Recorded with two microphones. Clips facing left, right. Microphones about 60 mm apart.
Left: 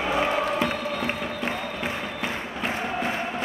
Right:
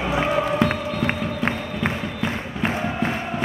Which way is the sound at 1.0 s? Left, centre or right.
Right.